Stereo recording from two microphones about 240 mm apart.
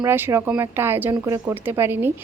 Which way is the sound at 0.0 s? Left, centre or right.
Centre.